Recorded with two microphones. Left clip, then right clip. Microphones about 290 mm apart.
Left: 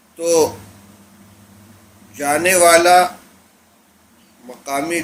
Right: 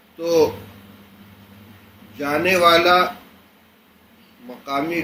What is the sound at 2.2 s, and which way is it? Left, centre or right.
Speech, left.